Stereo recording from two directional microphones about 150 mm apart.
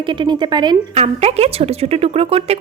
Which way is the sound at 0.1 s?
30° right (ahead or behind).